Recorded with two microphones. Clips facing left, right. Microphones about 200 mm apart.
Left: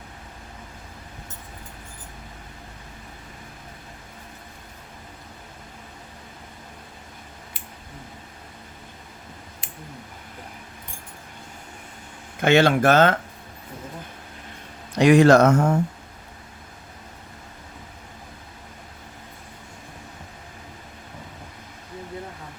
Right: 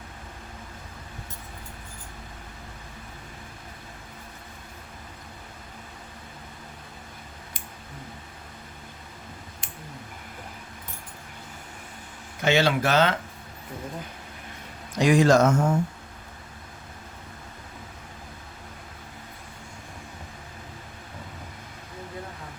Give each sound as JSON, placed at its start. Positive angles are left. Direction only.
{"t": 12.4, "sound": "speech", "side_deg": 55}
{"t": 14.9, "sound": "speech", "side_deg": 65}